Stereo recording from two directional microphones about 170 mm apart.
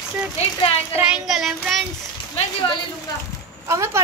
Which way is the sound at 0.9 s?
5° right (ahead or behind).